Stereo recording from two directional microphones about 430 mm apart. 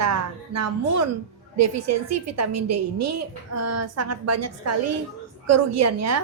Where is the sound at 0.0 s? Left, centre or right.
Right.